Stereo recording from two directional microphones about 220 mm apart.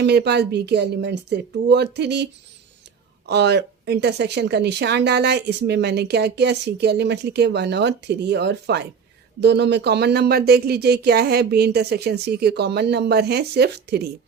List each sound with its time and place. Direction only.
0.0 s speech: 50° right (ahead or behind)